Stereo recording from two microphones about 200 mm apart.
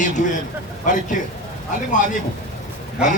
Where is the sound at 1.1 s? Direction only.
40° left (ahead or behind).